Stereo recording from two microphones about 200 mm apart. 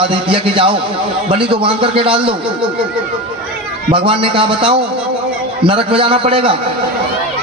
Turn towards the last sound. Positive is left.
turn(degrees=-25)  # may be behind; listen again after turning